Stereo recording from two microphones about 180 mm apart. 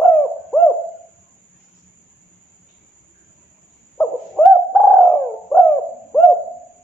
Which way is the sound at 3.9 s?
5° left (ahead or behind).